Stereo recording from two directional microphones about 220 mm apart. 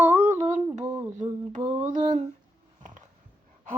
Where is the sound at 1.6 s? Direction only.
35° right (ahead or behind).